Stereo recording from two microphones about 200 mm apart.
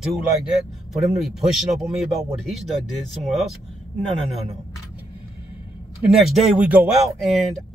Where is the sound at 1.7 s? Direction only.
Centre (ahead or behind).